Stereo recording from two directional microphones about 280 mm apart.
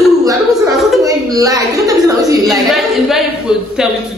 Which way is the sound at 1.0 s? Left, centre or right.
Centre.